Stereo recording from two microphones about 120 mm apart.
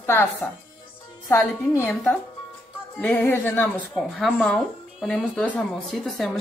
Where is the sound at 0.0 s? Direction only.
20° left (ahead or behind).